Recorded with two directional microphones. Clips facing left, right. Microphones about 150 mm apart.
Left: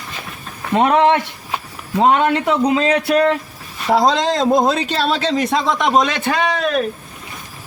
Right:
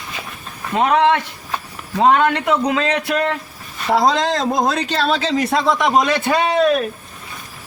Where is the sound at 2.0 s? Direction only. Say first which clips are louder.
Even; 5° left (ahead or behind).